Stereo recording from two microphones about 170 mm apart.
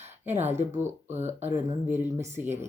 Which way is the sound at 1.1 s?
40° right (ahead or behind).